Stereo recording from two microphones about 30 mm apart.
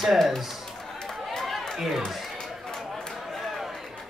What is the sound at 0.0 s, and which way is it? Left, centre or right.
Speech, centre.